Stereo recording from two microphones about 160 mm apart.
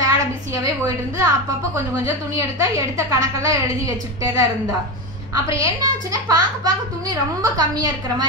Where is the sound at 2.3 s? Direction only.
20° right (ahead or behind).